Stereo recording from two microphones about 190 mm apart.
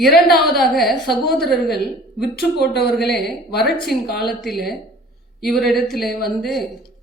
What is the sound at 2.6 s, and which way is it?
Speech, 60° left (ahead or behind).